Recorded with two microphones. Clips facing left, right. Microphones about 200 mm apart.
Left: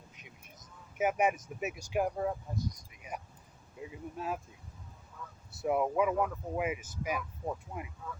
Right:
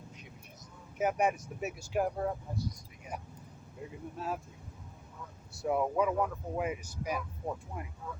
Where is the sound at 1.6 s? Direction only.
5° left (ahead or behind).